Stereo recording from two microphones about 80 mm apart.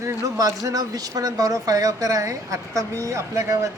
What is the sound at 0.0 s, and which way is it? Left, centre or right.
Speech, right.